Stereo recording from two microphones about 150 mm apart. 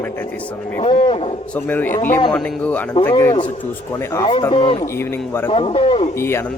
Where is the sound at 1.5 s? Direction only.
10° left (ahead or behind).